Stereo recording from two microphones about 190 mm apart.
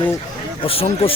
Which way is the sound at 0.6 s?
30° left (ahead or behind).